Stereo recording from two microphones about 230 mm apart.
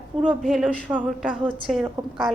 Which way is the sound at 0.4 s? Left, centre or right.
Centre.